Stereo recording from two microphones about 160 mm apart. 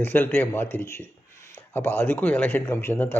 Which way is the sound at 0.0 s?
10° left (ahead or behind).